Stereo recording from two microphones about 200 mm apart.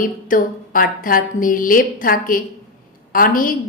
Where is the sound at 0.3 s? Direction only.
45° left (ahead or behind).